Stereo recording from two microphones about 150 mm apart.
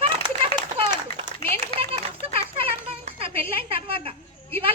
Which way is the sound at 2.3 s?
40° right (ahead or behind).